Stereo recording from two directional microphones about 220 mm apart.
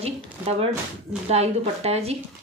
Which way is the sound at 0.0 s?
25° right (ahead or behind).